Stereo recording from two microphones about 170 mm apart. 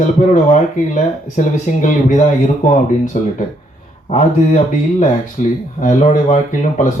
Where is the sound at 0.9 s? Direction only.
50° left (ahead or behind).